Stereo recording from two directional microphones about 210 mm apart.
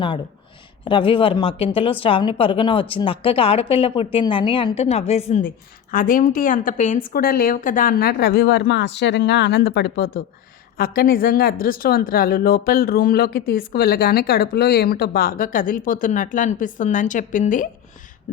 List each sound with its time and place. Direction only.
0.9 s a woman's voice: 25° left (ahead or behind)